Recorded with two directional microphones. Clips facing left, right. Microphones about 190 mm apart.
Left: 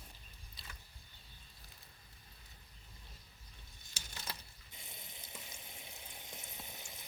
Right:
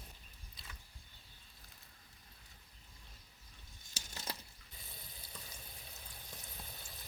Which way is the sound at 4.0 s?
40° right (ahead or behind).